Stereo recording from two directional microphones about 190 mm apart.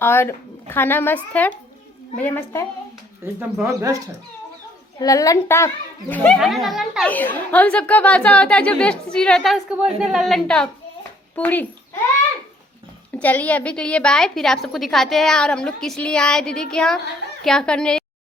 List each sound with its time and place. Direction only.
0.0 s speech: 10° left (ahead or behind)
3.2 s speech: 15° right (ahead or behind)
4.9 s speech: 20° left (ahead or behind)
13.1 s speech: 10° left (ahead or behind)